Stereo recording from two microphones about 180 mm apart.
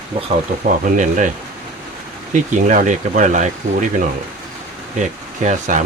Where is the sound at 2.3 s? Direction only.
45° right (ahead or behind).